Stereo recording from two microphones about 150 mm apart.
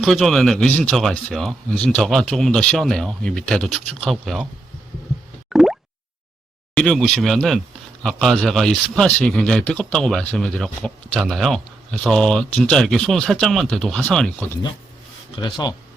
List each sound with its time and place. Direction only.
0.0 s speech: centre (ahead or behind)
5.5 s plop: centre (ahead or behind)
6.7 s speech: 5° left (ahead or behind)
15.4 s speech: 30° left (ahead or behind)